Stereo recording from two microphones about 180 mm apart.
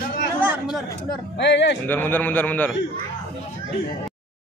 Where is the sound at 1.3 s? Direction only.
80° left.